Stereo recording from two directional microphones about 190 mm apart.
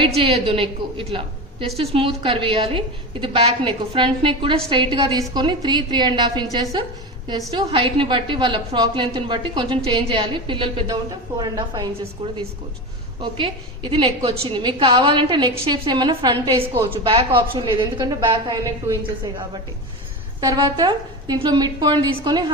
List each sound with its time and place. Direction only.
0.2 s a woman's voice: 30° right (ahead or behind)
20.4 s a woman's voice: 20° right (ahead or behind)